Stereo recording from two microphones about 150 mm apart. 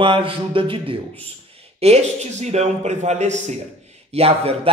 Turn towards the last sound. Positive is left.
turn(degrees=-40)  # may be behind; listen again after turning